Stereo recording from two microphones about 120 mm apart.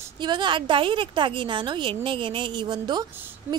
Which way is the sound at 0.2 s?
40° right (ahead or behind).